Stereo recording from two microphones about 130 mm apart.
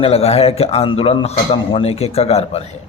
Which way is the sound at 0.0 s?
55° left (ahead or behind).